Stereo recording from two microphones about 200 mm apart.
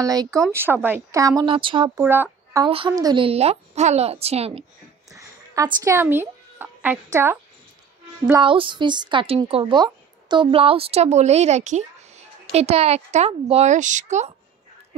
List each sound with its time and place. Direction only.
0.0 s a woman's voice: 20° right (ahead or behind)
2.0 s speech: 10° right (ahead or behind)
2.6 s a woman's voice: 25° right (ahead or behind)
5.1 s a sound: 15° right (ahead or behind)
8.4 s a woman's voice: 25° right (ahead or behind)